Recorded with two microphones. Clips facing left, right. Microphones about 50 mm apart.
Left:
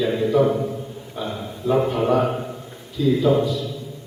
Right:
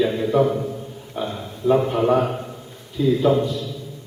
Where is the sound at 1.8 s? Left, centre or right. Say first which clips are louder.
Right 1 dB; centre.